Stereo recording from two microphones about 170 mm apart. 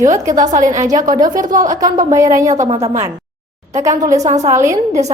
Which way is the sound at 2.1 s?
20° right (ahead or behind).